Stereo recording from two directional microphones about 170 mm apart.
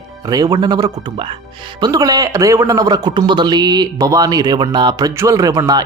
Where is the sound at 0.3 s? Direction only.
25° right (ahead or behind).